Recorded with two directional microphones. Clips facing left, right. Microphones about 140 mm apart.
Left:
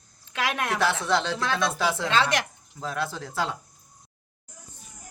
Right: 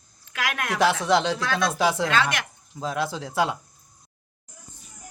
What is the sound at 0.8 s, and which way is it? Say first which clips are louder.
A man's voice: right 6 dB; 15° right (ahead or behind).